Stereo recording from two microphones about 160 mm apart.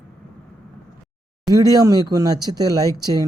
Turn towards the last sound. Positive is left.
turn(degrees=-25)  # may be behind; listen again after turning